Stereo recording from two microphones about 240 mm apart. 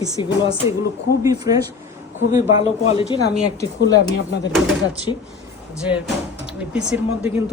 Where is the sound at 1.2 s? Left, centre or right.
Centre.